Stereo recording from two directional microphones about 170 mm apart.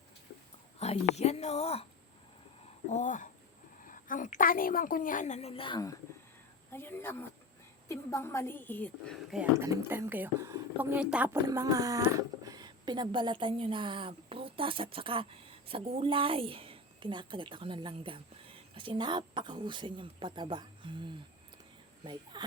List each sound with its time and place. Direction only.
0.8 s speech: 40° left (ahead or behind)
2.9 s a woman's voice: 50° left (ahead or behind); by 9.1 s 10° left (ahead or behind)
9.3 s a woman's voice: 10° right (ahead or behind)
11.4 s speech: 20° right (ahead or behind)
22.0 s speech: 25° right (ahead or behind)